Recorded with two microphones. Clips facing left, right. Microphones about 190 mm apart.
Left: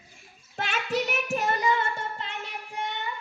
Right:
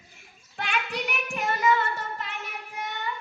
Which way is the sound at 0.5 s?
40° left (ahead or behind).